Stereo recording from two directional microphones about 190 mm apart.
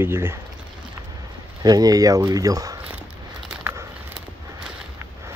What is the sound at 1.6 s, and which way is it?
Speech, 20° right (ahead or behind).